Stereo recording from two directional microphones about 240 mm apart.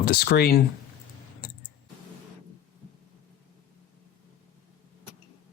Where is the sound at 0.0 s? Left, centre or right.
Left.